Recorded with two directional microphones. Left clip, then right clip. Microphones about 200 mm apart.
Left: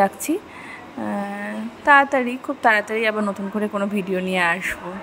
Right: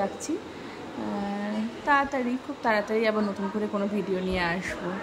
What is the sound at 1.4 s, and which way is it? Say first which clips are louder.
A woman's voice: left 7 dB; 25° left (ahead or behind).